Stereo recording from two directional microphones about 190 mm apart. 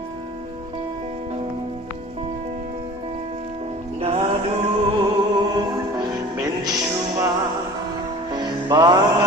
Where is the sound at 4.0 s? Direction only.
30° right (ahead or behind).